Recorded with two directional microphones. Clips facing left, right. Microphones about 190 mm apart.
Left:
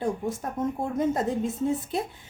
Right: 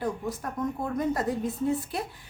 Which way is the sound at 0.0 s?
25° left (ahead or behind).